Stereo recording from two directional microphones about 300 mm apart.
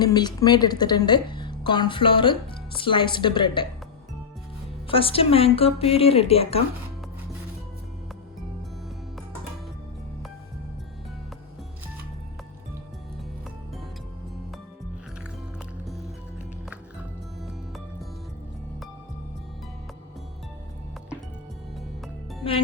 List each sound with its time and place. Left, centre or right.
0.0 s a woman's voice: centre
4.9 s a woman's voice: centre
16.6 s music: centre